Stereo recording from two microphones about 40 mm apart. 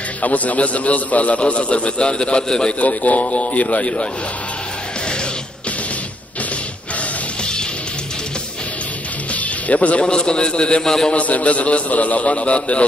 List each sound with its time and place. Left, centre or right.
0.2 s a man's voice: left
2.8 s a man's voice: left
9.3 s a man's voice: left
10.8 s a man's voice: centre
11.1 s a man's voice: left